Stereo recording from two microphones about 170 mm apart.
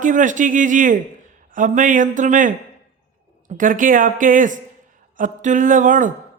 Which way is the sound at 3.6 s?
50° right (ahead or behind).